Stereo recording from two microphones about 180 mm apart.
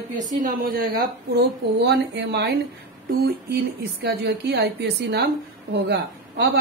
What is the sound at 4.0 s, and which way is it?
A woman's voice, 65° right (ahead or behind).